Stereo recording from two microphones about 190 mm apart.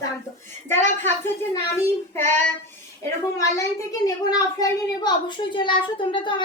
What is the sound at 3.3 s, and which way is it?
A child's voice, 15° left (ahead or behind).